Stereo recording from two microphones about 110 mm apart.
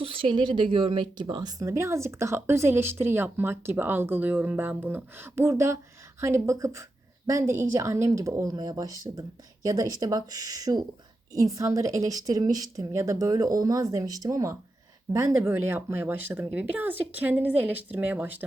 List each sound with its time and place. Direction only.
0.0 s a woman's voice: 55° right (ahead or behind); by 18.4 s 15° right (ahead or behind)